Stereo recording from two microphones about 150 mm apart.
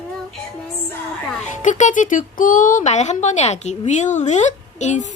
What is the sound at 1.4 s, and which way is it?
Speech, 55° left (ahead or behind).